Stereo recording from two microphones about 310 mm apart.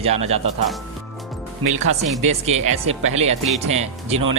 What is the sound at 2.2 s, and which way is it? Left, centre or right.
Speech, right.